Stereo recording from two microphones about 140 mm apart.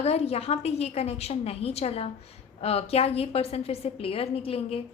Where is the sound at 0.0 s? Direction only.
50° left (ahead or behind).